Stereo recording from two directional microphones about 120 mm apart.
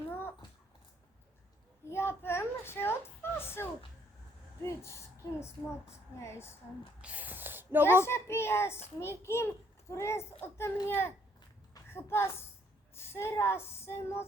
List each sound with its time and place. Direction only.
0.1 s a sound: 20° left (ahead or behind)
1.9 s a sound: 20° left (ahead or behind)
4.6 s a woman's voice: 25° left (ahead or behind)
7.0 s speech: 10° right (ahead or behind)
8.0 s a woman's voice: 20° left (ahead or behind)
12.9 s female singing: 20° left (ahead or behind)